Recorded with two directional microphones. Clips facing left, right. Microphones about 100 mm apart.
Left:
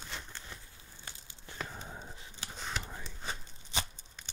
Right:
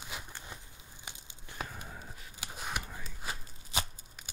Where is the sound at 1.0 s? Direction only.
15° right (ahead or behind).